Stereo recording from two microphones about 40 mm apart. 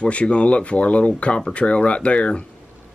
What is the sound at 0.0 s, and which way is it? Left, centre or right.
Speech, left.